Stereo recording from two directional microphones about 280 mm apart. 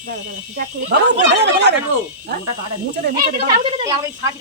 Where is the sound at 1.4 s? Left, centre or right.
Right.